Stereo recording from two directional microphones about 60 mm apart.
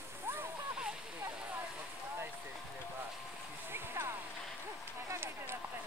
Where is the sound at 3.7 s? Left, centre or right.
Right.